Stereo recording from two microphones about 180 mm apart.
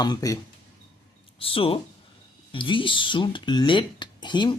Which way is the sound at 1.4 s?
30° left (ahead or behind).